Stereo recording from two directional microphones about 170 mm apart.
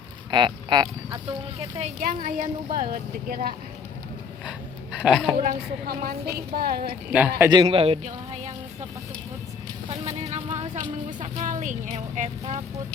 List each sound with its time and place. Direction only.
0.3 s speech: 25° right (ahead or behind)
1.5 s speech: 35° right (ahead or behind)
2.0 s a woman's voice: 55° right (ahead or behind)
4.4 s speech: 5° right (ahead or behind)
5.4 s a woman's voice: 60° right (ahead or behind)
7.1 s a man's voice: 10° right (ahead or behind)
7.5 s speech: 30° right (ahead or behind)
10.0 s speech: 40° right (ahead or behind)